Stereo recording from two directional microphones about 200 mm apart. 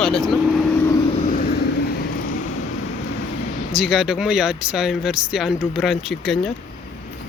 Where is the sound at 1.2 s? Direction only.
45° left (ahead or behind).